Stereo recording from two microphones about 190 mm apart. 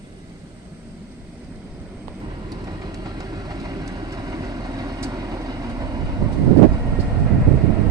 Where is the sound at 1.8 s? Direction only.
10° right (ahead or behind).